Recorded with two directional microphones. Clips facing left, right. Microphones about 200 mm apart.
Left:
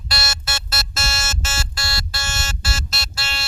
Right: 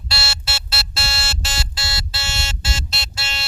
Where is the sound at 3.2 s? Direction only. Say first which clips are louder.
Left 1 dB; 20° right (ahead or behind).